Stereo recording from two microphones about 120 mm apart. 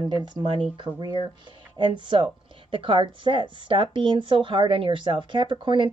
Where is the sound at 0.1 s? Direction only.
40° right (ahead or behind).